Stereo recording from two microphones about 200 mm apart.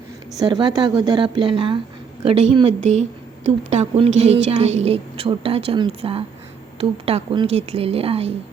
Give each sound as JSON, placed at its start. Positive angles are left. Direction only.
{"t": 0.3, "sound": "a woman's voice", "side_deg": -20}